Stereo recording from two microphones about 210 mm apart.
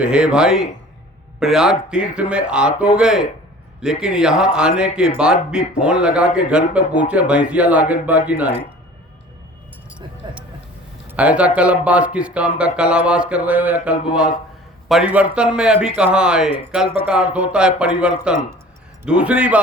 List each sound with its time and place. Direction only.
0.0 s speech: 5° right (ahead or behind)
10.2 s vehicle: 20° right (ahead or behind)
11.1 s speech: 5° right (ahead or behind)